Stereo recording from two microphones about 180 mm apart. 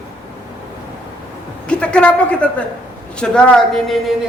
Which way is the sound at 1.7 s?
5° left (ahead or behind).